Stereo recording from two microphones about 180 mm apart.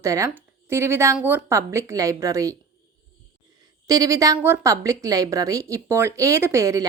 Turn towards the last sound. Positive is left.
turn(degrees=-15)  # may be behind; listen again after turning